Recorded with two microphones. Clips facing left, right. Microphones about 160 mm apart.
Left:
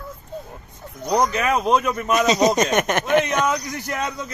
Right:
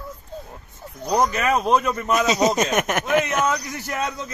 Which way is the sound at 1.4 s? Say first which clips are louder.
Even; 15° left (ahead or behind).